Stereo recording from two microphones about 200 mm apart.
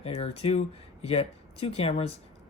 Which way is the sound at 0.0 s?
30° left (ahead or behind).